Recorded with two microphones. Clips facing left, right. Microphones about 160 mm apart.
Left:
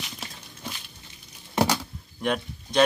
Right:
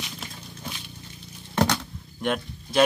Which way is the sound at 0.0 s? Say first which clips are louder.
Right 2 dB; centre (ahead or behind).